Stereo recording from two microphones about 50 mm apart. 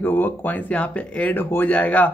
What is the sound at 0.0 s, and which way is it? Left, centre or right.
Speech, left.